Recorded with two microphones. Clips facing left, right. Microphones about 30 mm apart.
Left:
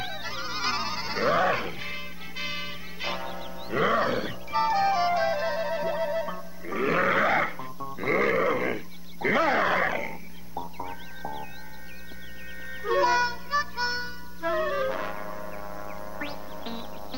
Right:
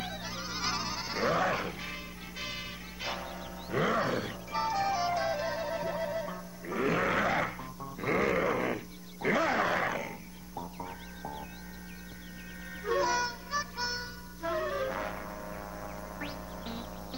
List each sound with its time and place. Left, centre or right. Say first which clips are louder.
0.0 s music: left 5 dB; left
8.1 s goat: left 5 dB; centre
10.5 s music: left 5 dB; left
12.8 s music: left 6 dB; left
16.3 s music: left 4 dB; left